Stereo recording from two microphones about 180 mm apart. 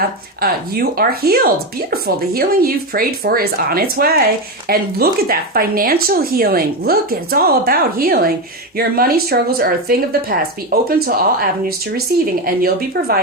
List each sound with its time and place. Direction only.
0.4 s speech: 55° right (ahead or behind)
12.5 s speech: 55° right (ahead or behind)